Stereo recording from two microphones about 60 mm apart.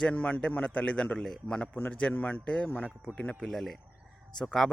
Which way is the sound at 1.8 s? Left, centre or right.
Left.